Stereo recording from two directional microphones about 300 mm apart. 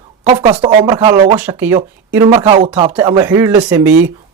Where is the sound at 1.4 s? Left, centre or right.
Centre.